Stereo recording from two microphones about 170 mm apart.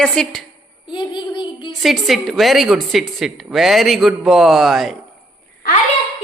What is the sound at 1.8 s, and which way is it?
Speech, centre (ahead or behind).